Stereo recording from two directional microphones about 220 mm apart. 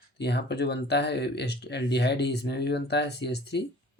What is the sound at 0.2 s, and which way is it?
Speech, 50° left (ahead or behind).